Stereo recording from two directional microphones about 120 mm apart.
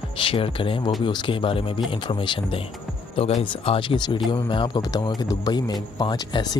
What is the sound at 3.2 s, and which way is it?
Speech, 60° left (ahead or behind).